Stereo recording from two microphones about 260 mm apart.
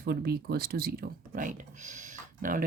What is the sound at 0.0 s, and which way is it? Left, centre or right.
Speech, right.